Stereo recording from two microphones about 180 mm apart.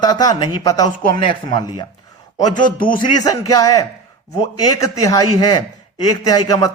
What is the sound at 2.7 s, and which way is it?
Music, 50° left (ahead or behind).